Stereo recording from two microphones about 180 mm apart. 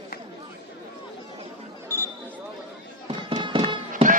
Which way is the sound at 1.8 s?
15° left (ahead or behind).